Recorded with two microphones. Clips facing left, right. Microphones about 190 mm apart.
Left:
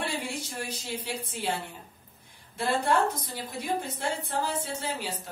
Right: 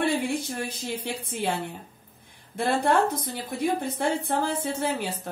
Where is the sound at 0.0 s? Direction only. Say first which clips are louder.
Right 8 dB; 55° right (ahead or behind).